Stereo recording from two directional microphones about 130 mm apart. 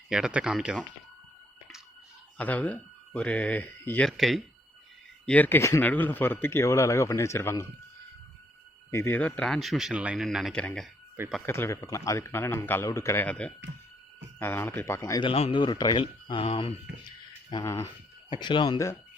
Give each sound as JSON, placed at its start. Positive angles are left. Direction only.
{"t": 0.1, "sound": "speech", "side_deg": -5}
{"t": 2.4, "sound": "speech", "side_deg": 10}
{"t": 4.2, "sound": "speech", "side_deg": 0}
{"t": 5.2, "sound": "a man's voice", "side_deg": 10}
{"t": 8.9, "sound": "speech", "side_deg": 20}
{"t": 11.4, "sound": "a man's voice", "side_deg": 20}
{"t": 13.2, "sound": "a man's voice", "side_deg": 10}
{"t": 15.2, "sound": "speech", "side_deg": 45}
{"t": 15.6, "sound": "speech", "side_deg": 35}
{"t": 17.5, "sound": "a man's voice", "side_deg": 20}
{"t": 18.3, "sound": "speech", "side_deg": 35}